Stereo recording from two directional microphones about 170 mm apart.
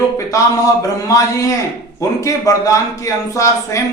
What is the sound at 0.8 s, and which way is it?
A man's voice, 20° left (ahead or behind).